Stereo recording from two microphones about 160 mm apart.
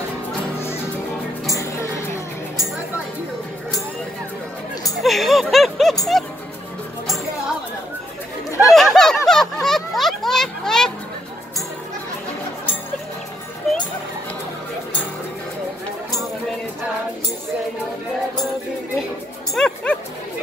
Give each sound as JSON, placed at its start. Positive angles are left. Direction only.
{"t": 1.5, "sound": "music", "side_deg": 20}
{"t": 5.0, "sound": "music", "side_deg": 0}
{"t": 8.5, "sound": "chatter", "side_deg": 20}
{"t": 8.7, "sound": "a sound", "side_deg": 0}
{"t": 19.5, "sound": "music", "side_deg": 5}